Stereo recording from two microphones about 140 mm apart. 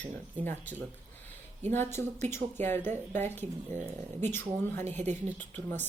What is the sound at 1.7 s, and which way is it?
Speech, 15° left (ahead or behind).